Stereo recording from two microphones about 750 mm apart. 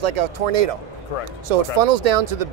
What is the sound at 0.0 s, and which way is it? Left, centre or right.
Speech, right.